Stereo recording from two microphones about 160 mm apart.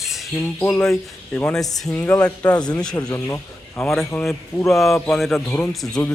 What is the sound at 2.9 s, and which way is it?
Speech, 20° left (ahead or behind).